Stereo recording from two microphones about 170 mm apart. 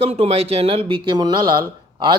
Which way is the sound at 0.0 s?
40° right (ahead or behind).